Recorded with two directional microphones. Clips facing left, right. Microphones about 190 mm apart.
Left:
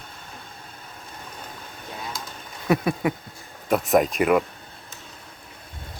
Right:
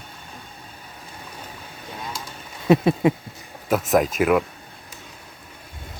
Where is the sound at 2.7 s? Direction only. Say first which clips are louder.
Right 5 dB; 25° right (ahead or behind).